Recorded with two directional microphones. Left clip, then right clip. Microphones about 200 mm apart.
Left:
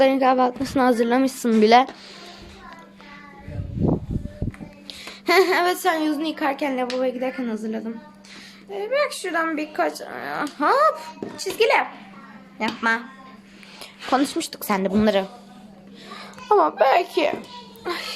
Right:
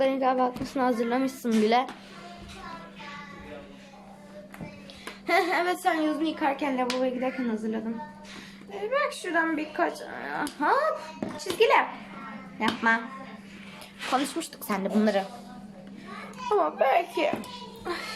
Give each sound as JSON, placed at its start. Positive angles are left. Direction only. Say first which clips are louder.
{"t": 0.0, "sound": "a woman's voice", "louder": "left 7 dB", "side_deg": 35}
{"t": 4.9, "sound": "a woman's voice", "louder": "left 6 dB", "side_deg": 50}
{"t": 8.9, "sound": "speech", "louder": "left 4 dB", "side_deg": 50}
{"t": 14.1, "sound": "a woman's voice", "louder": "left 6 dB", "side_deg": 35}
{"t": 16.5, "sound": "a woman's voice", "louder": "left 7 dB", "side_deg": 40}